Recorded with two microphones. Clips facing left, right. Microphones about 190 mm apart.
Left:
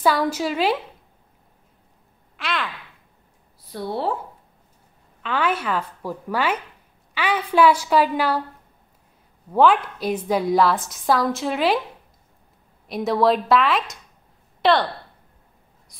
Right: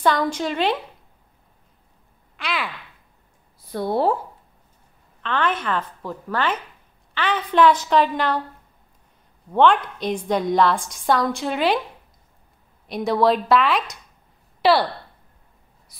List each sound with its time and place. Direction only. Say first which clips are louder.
0.0 s a woman's voice: even; 5° left (ahead or behind)
2.3 s speech: even; centre (ahead or behind)
3.7 s speech: right 5 dB; 50° right (ahead or behind)
5.2 s a woman's voice: even; 10° left (ahead or behind)
9.5 s a woman's voice: even; 5° left (ahead or behind)
12.8 s a woman's voice: even; centre (ahead or behind)
15.9 s a sound: left 1 dB; 5° right (ahead or behind)